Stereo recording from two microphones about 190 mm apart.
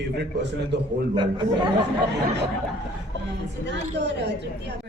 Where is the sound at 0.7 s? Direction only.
65° right (ahead or behind).